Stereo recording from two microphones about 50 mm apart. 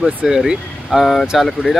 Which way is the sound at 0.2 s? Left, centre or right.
Centre.